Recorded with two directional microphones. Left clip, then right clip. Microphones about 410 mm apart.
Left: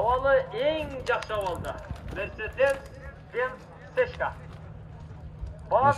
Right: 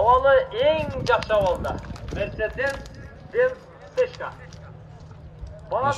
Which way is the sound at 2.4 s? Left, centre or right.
Centre.